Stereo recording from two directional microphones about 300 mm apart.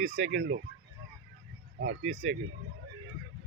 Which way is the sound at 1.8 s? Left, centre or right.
Right.